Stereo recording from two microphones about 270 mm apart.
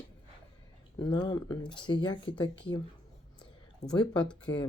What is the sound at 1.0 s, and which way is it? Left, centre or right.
Speech, centre.